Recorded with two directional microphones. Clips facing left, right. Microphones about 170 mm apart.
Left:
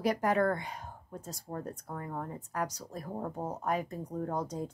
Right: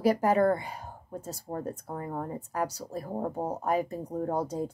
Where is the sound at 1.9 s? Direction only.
20° right (ahead or behind).